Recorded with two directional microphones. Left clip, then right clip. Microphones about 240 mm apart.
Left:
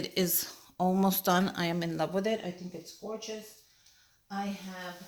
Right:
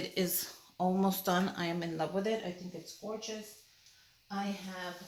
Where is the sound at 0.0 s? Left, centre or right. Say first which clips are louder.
Left 3 dB; left.